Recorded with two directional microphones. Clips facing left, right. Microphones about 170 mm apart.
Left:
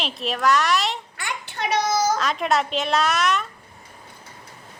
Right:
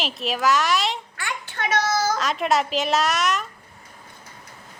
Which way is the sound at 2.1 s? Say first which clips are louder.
Even; centre (ahead or behind).